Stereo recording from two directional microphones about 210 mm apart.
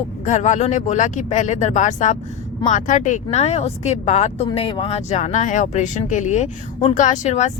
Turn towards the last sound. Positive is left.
turn(degrees=35)  # may be behind; listen again after turning